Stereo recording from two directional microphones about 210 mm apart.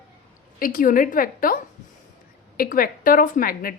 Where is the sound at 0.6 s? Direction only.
40° left (ahead or behind).